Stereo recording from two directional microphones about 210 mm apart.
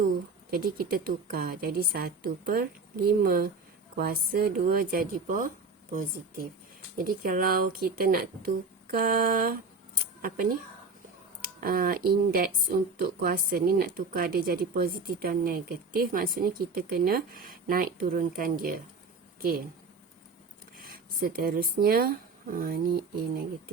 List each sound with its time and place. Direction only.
0.5 s speech: 45° right (ahead or behind)
11.6 s a woman's voice: 45° right (ahead or behind)
20.9 s speech: 45° right (ahead or behind)